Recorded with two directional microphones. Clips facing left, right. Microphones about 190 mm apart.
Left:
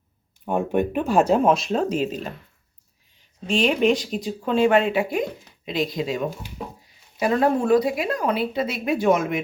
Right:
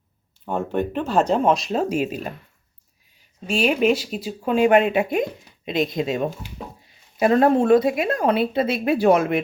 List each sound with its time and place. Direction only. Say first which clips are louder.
0.4 s speech: left 2 dB; 15° left (ahead or behind); by 9.4 s 35° right (ahead or behind)